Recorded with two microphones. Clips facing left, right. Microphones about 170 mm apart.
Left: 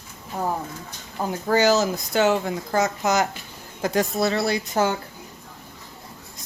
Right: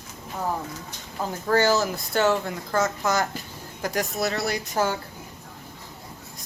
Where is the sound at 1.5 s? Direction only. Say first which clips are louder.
Left 2 dB; 15° left (ahead or behind).